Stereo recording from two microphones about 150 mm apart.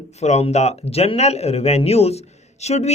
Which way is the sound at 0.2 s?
45° left (ahead or behind).